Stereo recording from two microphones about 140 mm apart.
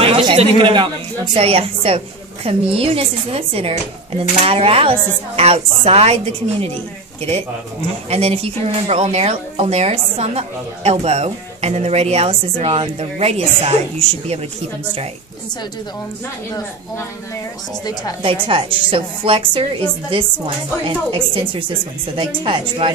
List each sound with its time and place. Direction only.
0.0 s a woman's voice: 40° right (ahead or behind)
8.1 s speech: 45° right (ahead or behind)
18.2 s a woman's voice: 40° right (ahead or behind)